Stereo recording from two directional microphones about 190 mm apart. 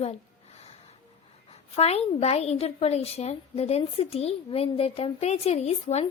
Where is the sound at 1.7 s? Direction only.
35° left (ahead or behind).